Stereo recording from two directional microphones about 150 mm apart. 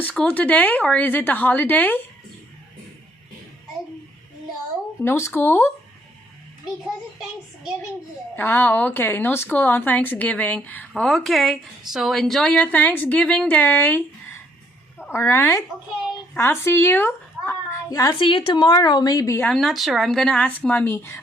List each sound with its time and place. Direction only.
0.0 s speech: 5° left (ahead or behind)
5.0 s speech: 15° left (ahead or behind)
6.8 s a child's voice: 5° right (ahead or behind)
8.4 s speech: 15° left (ahead or behind)
15.1 s speech: 15° left (ahead or behind)
19.5 s speech: centre (ahead or behind); by 21.2 s 15° left (ahead or behind)